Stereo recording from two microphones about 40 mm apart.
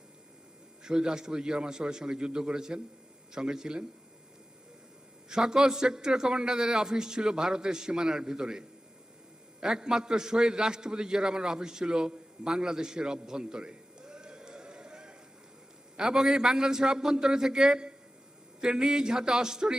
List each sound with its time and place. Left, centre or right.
0.9 s a man's voice: centre
5.3 s a man's voice: centre